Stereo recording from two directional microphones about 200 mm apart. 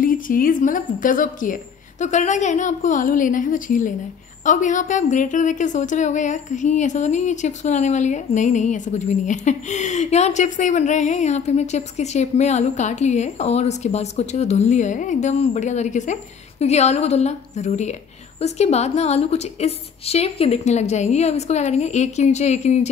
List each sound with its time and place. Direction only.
0.0 s a woman's voice: 45° left (ahead or behind)